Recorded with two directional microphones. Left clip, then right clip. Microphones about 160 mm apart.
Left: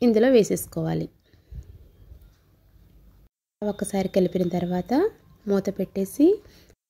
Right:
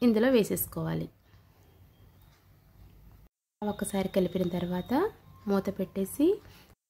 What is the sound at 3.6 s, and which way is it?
Speech, 25° left (ahead or behind).